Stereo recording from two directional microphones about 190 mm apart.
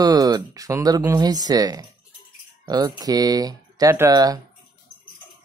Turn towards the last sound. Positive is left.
turn(degrees=-20)  # may be behind; listen again after turning